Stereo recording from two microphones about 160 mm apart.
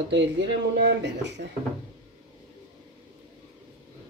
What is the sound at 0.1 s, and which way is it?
Speech, 90° right.